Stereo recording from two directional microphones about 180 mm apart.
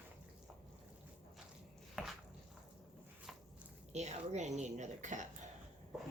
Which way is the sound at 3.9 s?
40° right (ahead or behind).